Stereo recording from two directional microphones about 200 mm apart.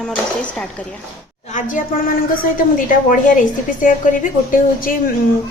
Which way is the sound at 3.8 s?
40° left (ahead or behind).